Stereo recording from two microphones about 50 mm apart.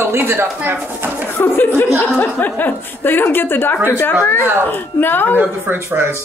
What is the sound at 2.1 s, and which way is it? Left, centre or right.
A woman's voice, left.